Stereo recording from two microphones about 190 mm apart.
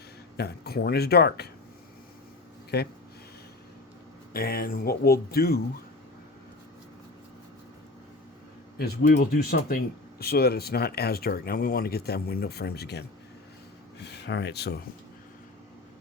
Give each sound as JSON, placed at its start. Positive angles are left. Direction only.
{"t": 0.3, "sound": "speech", "side_deg": 60}
{"t": 2.7, "sound": "speech", "side_deg": 60}
{"t": 4.3, "sound": "speech", "side_deg": 55}
{"t": 8.8, "sound": "speech", "side_deg": 55}